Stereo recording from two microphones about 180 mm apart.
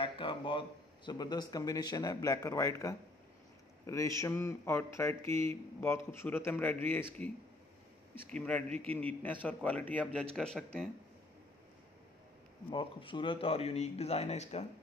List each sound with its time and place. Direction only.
0.0 s speech: 30° left (ahead or behind); by 7.2 s 10° left (ahead or behind)
8.4 s speech: 10° left (ahead or behind)
8.6 s a man's voice: 35° right (ahead or behind)
8.9 s speech: 10° left (ahead or behind)
12.6 s speech: 30° left (ahead or behind)